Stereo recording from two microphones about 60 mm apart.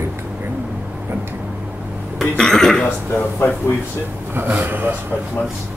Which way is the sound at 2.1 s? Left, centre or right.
Centre.